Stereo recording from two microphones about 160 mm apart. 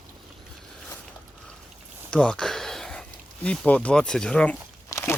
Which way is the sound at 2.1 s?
5° left (ahead or behind).